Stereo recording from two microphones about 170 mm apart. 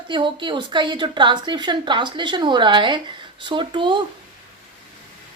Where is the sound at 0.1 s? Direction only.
30° right (ahead or behind).